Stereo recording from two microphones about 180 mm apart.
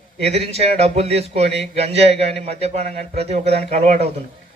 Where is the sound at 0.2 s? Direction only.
35° right (ahead or behind).